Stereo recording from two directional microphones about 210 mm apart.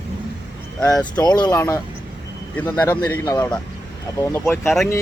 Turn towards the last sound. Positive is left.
turn(degrees=10)  # may be behind; listen again after turning